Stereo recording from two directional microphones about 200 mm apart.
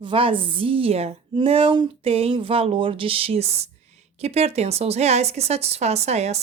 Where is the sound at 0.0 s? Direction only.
25° right (ahead or behind).